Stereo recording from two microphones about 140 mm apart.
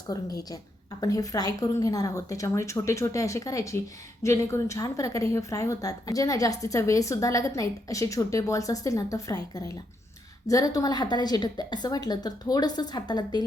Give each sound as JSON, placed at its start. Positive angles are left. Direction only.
{"t": 0.1, "sound": "a woman's voice", "side_deg": 25}